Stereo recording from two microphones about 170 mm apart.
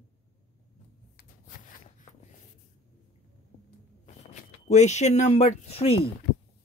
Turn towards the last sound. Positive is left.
turn(degrees=35)  # may be behind; listen again after turning